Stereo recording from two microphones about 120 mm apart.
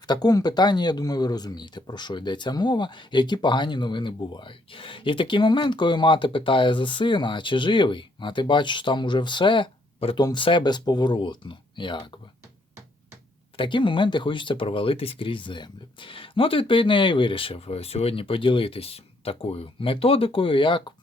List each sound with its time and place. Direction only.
0.0 s speech: 35° left (ahead or behind)
13.6 s speech: 45° left (ahead or behind)